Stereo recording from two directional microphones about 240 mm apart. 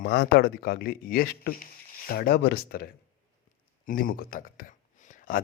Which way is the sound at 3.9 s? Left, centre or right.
Left.